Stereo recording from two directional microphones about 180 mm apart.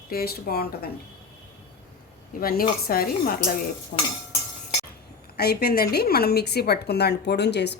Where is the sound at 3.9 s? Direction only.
50° left (ahead or behind).